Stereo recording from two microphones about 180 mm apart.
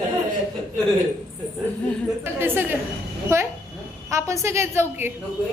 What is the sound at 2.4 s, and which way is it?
A woman's voice, 10° right (ahead or behind).